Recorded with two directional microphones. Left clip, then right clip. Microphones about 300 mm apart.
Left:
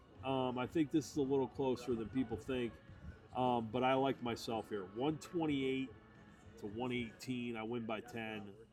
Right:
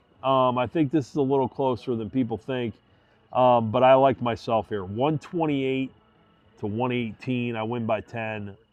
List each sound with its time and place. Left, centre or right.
0.2 s speech: centre